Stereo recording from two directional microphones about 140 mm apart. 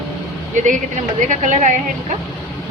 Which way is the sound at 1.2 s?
60° right (ahead or behind).